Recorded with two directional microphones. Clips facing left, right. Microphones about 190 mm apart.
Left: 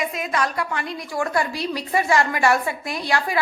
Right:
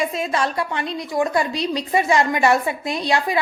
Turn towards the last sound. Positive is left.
turn(degrees=-20)  # may be behind; listen again after turning